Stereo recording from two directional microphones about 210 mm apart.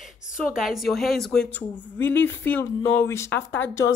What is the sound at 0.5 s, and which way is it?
Speech, centre (ahead or behind).